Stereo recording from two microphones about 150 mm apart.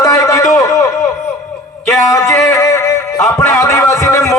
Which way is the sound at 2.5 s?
20° left (ahead or behind).